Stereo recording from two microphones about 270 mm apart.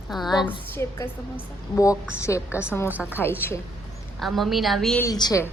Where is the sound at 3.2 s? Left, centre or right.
Centre.